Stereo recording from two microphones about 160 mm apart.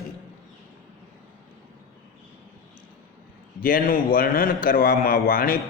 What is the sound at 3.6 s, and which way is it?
A man's voice, 65° left (ahead or behind).